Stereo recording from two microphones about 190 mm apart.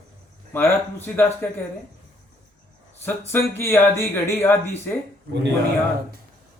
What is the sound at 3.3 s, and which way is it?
Speech, 15° left (ahead or behind).